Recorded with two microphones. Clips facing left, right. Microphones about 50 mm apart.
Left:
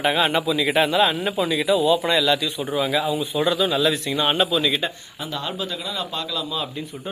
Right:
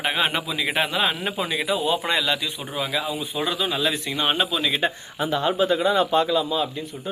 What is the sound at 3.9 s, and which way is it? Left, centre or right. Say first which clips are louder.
Speech: left 3 dB; right.